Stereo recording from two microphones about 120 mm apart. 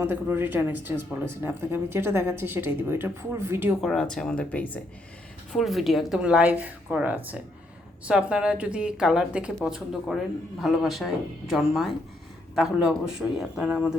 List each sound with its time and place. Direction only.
0.0 s speech: 15° right (ahead or behind)
3.8 s a man's voice: centre (ahead or behind)
5.5 s a man's voice: centre (ahead or behind)